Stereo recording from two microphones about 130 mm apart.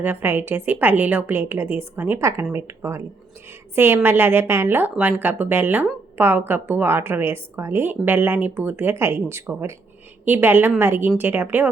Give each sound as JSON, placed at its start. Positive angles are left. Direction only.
{"t": 0.0, "sound": "a woman's voice", "side_deg": -15}